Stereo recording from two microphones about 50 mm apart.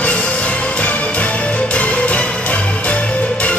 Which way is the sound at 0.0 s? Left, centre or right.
Left.